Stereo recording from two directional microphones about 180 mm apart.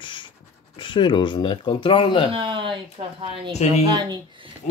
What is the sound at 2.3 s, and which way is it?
Speech, 30° right (ahead or behind).